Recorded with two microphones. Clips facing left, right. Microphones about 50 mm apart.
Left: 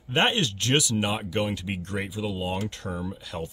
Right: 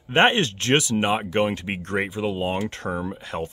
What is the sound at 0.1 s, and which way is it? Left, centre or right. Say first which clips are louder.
Speech: right 5 dB; right.